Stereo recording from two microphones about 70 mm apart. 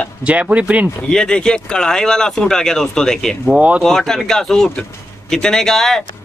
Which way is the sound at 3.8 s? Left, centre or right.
Centre.